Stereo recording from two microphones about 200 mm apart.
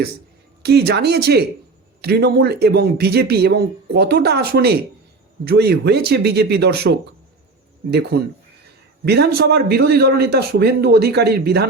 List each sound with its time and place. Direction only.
0.6 s speech: 55° right (ahead or behind)